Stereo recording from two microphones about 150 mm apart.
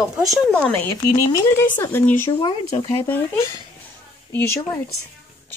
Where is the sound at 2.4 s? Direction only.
35° left (ahead or behind).